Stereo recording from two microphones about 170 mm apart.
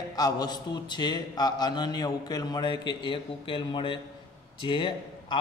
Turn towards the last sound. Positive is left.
turn(degrees=30)  # may be behind; listen again after turning